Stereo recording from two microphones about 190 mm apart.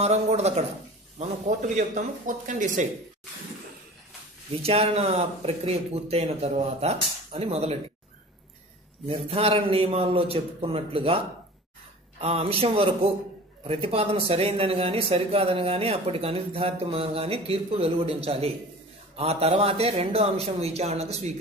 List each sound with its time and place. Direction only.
0.0 s speech: 35° right (ahead or behind)
4.6 s speech: 30° right (ahead or behind)
9.0 s speech: 30° right (ahead or behind)